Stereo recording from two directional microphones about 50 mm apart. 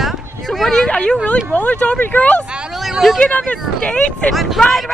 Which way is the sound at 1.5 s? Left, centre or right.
Left.